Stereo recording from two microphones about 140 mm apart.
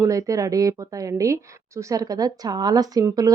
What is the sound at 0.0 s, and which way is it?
Speech, 25° right (ahead or behind).